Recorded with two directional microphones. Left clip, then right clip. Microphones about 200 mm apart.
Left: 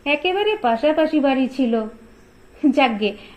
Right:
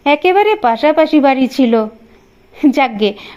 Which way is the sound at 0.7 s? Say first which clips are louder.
Right 6 dB; 35° right (ahead or behind).